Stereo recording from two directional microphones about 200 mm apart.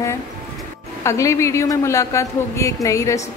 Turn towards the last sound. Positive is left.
turn(degrees=15)  # may be behind; listen again after turning